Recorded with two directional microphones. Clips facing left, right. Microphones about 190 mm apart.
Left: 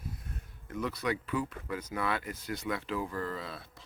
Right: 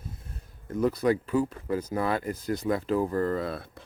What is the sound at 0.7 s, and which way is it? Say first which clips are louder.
Speech: right 9 dB; 40° right (ahead or behind).